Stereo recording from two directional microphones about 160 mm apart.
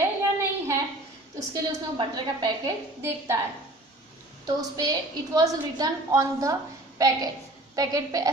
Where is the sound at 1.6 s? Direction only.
25° right (ahead or behind).